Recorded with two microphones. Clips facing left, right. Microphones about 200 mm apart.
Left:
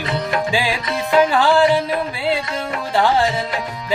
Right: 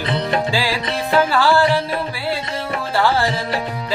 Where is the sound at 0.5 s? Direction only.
20° left (ahead or behind).